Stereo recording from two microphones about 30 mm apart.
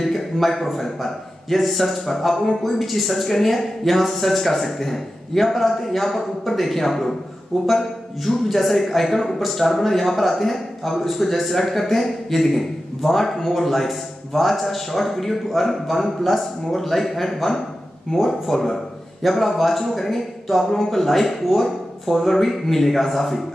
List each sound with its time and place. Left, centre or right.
0.0 s a man's voice: centre